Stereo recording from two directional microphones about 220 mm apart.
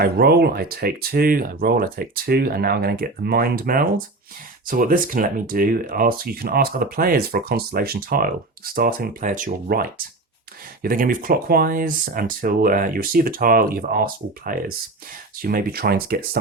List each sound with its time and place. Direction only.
0.0 s speech: 45° right (ahead or behind)
10.8 s speech: 40° right (ahead or behind)